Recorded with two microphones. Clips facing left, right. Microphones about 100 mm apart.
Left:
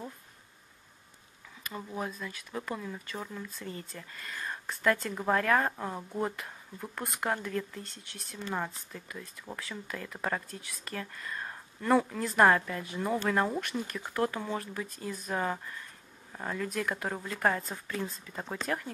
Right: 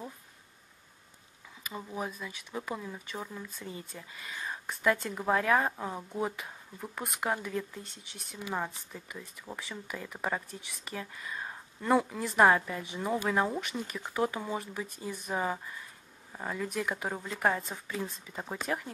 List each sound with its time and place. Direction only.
1.6 s speech: 5° right (ahead or behind)